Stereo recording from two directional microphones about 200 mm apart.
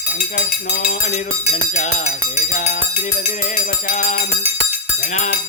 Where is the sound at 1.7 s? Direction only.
35° left (ahead or behind).